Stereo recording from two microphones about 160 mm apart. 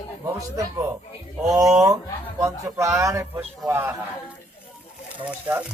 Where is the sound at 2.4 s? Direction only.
20° right (ahead or behind).